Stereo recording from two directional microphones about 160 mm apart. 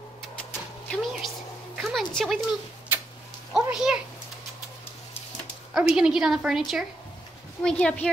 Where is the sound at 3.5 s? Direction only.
5° right (ahead or behind).